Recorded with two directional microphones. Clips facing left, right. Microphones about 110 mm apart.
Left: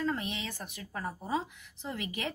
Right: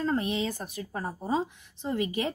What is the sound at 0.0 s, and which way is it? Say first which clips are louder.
A woman's voice: right 6 dB; 40° right (ahead or behind).